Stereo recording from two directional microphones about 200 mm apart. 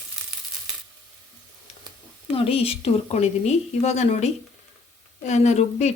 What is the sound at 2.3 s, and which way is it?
A woman's voice, 30° left (ahead or behind).